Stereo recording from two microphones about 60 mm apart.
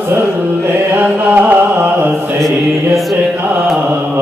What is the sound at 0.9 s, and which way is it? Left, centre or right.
Chant, right.